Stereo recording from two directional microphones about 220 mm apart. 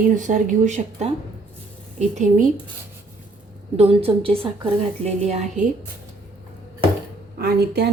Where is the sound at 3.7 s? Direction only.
25° right (ahead or behind).